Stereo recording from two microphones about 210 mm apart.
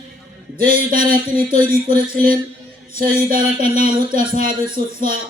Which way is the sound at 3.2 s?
40° right (ahead or behind).